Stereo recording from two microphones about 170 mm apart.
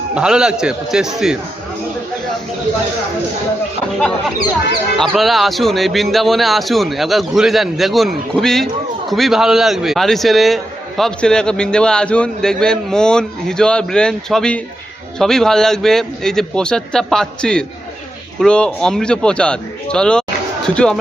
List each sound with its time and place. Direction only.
0.1 s a man's voice: 5° right (ahead or behind)
4.9 s a man's voice: centre (ahead or behind)